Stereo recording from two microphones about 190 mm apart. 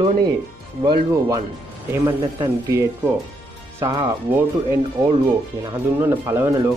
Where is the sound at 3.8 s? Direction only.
15° right (ahead or behind).